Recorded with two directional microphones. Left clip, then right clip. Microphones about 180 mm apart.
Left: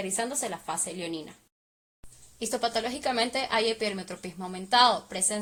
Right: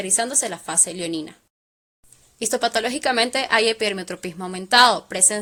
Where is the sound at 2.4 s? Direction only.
45° right (ahead or behind).